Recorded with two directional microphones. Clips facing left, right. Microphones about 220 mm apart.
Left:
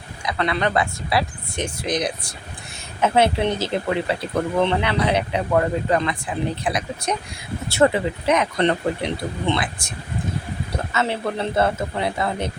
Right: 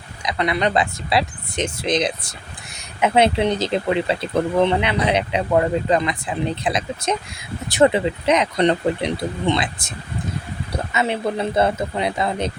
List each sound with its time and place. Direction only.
0.2 s speech: 15° right (ahead or behind)
10.9 s speech: 15° right (ahead or behind)